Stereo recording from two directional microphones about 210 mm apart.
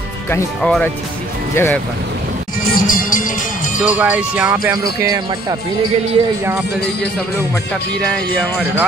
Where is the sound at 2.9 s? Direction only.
40° left (ahead or behind).